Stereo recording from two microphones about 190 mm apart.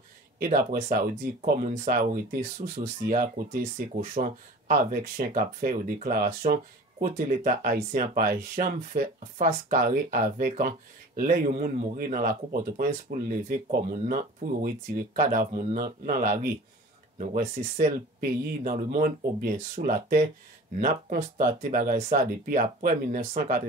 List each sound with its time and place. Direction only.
0.4 s speech: 40° right (ahead or behind)